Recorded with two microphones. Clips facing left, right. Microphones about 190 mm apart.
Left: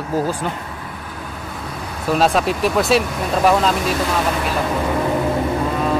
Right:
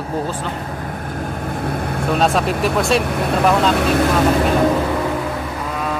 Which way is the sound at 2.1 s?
Centre (ahead or behind).